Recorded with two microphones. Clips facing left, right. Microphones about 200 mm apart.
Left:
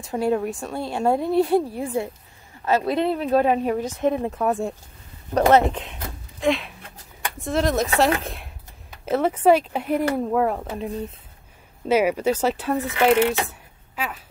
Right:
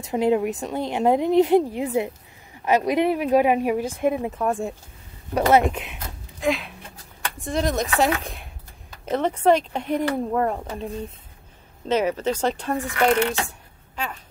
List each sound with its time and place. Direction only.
0.0 s a woman's voice: 20° right (ahead or behind); by 4.7 s centre (ahead or behind)
5.3 s a woman's voice: 10° right (ahead or behind)
6.4 s speech: centre (ahead or behind)
13.9 s a sound: 5° left (ahead or behind)